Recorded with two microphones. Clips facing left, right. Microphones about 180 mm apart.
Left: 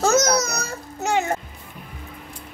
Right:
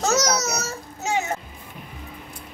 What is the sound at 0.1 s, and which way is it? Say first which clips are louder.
Babbling: left 3 dB; 55° left (ahead or behind).